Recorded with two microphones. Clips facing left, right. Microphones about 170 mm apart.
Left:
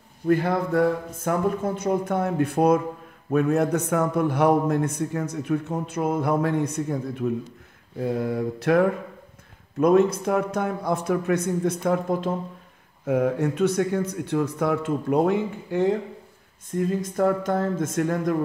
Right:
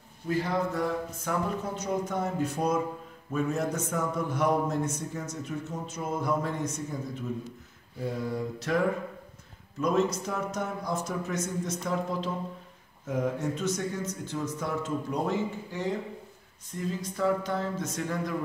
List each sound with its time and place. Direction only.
0.3 s a man's voice: 60° left (ahead or behind)
13.0 s a man's voice: 60° left (ahead or behind)